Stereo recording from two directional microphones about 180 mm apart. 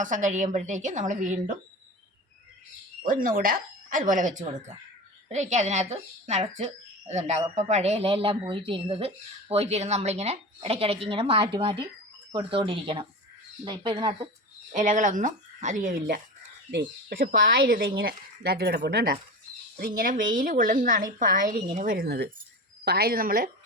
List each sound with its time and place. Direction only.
0.0 s speech: 45° right (ahead or behind)
3.0 s speech: 50° right (ahead or behind); by 14.3 s 25° right (ahead or behind)
14.7 s speech: 45° right (ahead or behind)